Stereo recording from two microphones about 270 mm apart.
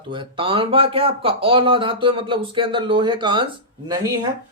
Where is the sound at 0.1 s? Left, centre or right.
Centre.